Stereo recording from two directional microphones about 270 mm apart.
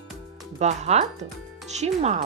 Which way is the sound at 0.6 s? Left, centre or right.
Right.